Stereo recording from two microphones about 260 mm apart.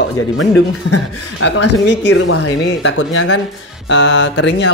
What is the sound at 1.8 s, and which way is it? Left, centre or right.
Speech, left.